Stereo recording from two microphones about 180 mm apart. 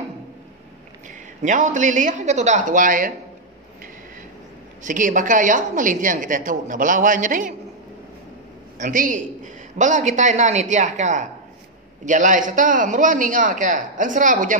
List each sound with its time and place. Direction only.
1.4 s a woman's voice: 45° right (ahead or behind)
4.8 s a woman's voice: 45° right (ahead or behind)
8.7 s a woman's voice: 45° right (ahead or behind)